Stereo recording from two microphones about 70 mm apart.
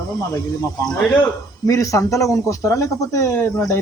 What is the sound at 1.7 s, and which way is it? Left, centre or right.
Speech, left.